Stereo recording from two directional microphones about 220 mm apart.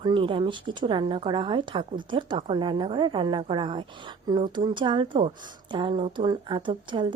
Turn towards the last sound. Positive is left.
turn(degrees=-20)  # may be behind; listen again after turning